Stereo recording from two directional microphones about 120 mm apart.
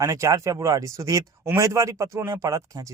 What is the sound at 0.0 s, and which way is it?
Speech, 25° right (ahead or behind).